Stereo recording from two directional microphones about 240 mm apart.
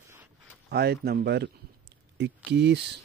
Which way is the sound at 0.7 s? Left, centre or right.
Right.